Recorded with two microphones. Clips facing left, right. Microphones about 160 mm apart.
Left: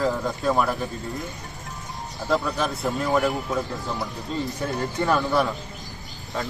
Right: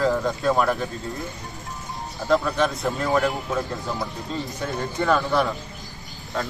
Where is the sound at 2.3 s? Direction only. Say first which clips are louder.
Right 3 dB; 5° left (ahead or behind).